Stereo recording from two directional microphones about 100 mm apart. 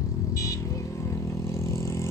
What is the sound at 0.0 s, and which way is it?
Vehicle, 35° left (ahead or behind).